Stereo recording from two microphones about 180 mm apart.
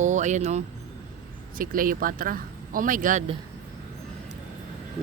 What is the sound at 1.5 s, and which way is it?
Speech, 50° right (ahead or behind).